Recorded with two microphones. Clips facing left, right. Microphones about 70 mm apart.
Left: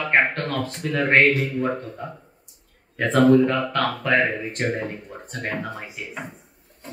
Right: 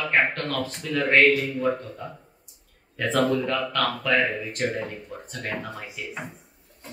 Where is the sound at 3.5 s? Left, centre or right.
Left.